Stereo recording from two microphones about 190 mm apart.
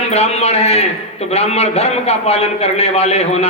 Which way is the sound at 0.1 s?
35° left (ahead or behind).